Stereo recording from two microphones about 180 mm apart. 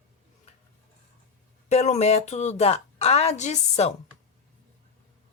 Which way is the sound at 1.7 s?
35° left (ahead or behind).